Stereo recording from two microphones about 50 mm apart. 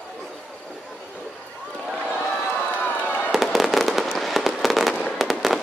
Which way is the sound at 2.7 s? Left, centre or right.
Left.